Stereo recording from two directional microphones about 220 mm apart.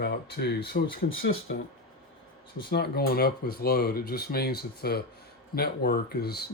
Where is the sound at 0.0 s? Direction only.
50° left (ahead or behind).